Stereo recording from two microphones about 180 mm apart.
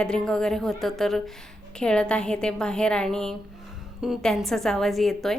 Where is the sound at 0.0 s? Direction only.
5° left (ahead or behind).